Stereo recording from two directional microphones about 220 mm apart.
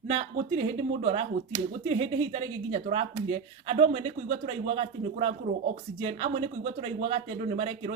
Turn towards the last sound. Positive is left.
turn(degrees=-25)  # may be behind; listen again after turning